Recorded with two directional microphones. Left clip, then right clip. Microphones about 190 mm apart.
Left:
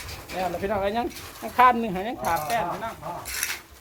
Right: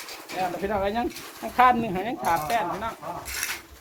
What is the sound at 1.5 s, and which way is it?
Speech, 25° left (ahead or behind).